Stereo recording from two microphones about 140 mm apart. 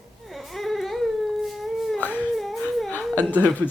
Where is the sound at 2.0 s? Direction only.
10° left (ahead or behind).